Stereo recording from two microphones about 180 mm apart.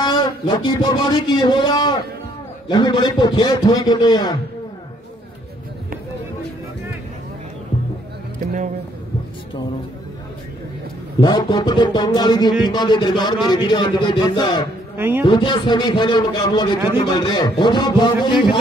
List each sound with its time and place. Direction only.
0.0 s a man's voice: 25° left (ahead or behind)
11.1 s a man's voice: 25° left (ahead or behind)
15.0 s a man's voice: 10° right (ahead or behind)
15.2 s a man's voice: 25° left (ahead or behind)